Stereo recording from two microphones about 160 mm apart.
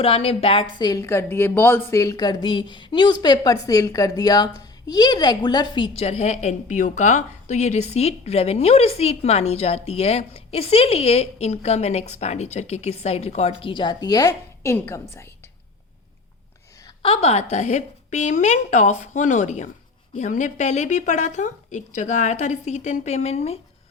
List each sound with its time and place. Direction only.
0.0 s a woman's voice: 35° left (ahead or behind); by 15.0 s 15° left (ahead or behind)
17.0 s a woman's voice: 35° left (ahead or behind)